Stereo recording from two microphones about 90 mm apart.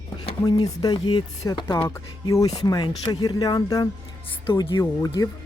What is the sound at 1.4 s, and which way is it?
Speech, 40° left (ahead or behind).